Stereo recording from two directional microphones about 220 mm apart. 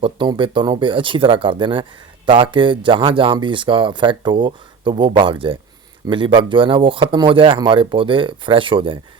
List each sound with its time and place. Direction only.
0.0 s speech: 20° right (ahead or behind)